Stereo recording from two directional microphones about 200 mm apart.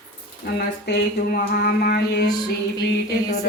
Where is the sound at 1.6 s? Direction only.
55° left (ahead or behind).